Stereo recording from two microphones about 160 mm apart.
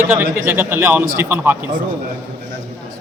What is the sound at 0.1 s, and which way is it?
A man's voice, 15° right (ahead or behind).